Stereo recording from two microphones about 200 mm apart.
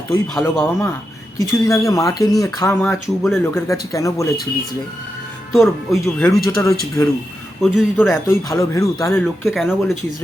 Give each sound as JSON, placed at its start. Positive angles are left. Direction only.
{"t": 0.4, "sound": "speech", "side_deg": 15}
{"t": 5.5, "sound": "speech", "side_deg": 0}
{"t": 7.6, "sound": "speech", "side_deg": 0}
{"t": 8.1, "sound": "speech", "side_deg": 15}
{"t": 9.4, "sound": "speech", "side_deg": 0}